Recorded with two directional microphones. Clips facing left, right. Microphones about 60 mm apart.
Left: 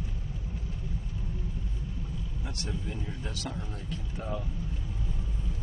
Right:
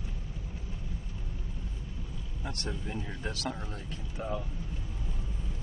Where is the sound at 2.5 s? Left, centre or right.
Right.